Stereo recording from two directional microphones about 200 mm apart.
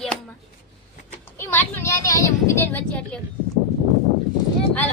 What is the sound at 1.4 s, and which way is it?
Speech, 10° left (ahead or behind).